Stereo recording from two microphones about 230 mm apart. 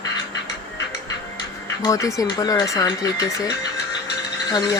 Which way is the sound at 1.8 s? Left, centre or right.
Centre.